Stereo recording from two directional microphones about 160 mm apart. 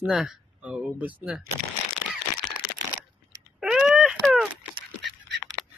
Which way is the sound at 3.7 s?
5° right (ahead or behind).